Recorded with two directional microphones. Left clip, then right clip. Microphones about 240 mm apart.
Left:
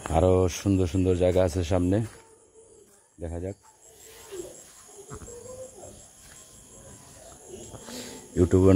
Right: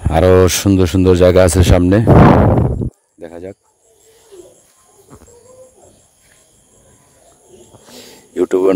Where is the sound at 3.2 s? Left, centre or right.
Right.